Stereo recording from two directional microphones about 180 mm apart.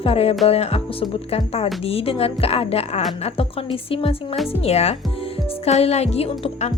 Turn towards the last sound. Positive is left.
turn(degrees=35)  # may be behind; listen again after turning